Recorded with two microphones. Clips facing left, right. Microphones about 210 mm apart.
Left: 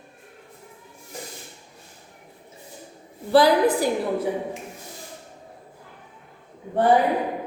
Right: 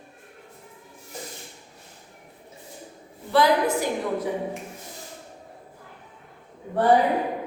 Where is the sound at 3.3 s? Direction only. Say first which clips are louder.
Left 4 dB; 35° left (ahead or behind).